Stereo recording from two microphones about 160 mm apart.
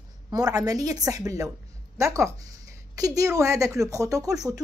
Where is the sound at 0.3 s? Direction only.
25° right (ahead or behind).